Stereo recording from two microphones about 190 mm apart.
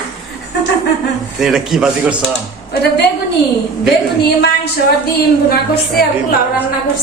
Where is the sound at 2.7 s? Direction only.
60° left (ahead or behind).